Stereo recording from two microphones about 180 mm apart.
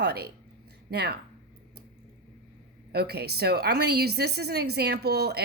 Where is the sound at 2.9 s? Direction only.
60° right (ahead or behind).